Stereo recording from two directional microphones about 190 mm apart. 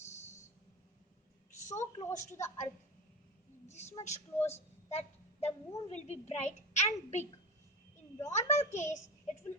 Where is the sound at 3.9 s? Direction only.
35° left (ahead or behind).